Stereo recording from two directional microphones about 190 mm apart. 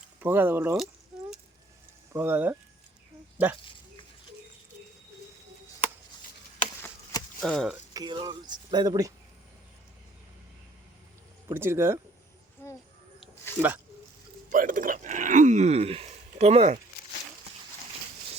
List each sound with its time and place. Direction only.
0.2 s speech: 10° right (ahead or behind)
2.1 s speech: 10° right (ahead or behind)
7.4 s speech: 5° left (ahead or behind)
7.9 s speech: 25° right (ahead or behind)
11.4 s speech: 15° right (ahead or behind)
12.6 s speech: 10° left (ahead or behind)
13.6 s speech: centre (ahead or behind)
14.5 s speech: 45° right (ahead or behind)